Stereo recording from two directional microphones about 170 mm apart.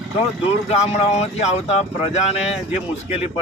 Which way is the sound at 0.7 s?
40° left (ahead or behind).